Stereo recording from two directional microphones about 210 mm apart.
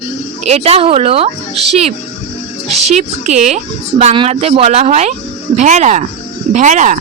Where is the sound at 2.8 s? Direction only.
30° right (ahead or behind).